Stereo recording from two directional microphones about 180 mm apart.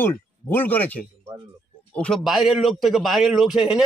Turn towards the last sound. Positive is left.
turn(degrees=-5)  # may be behind; listen again after turning